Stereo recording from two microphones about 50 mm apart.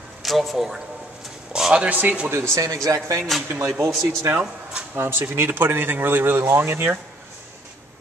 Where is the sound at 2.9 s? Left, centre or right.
Right.